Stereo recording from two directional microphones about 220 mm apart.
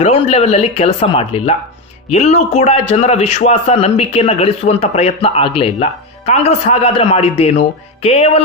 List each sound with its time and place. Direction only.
0.0 s a man's voice: 25° left (ahead or behind)